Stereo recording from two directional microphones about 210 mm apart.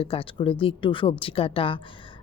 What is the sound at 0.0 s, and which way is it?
A woman's voice, 25° left (ahead or behind).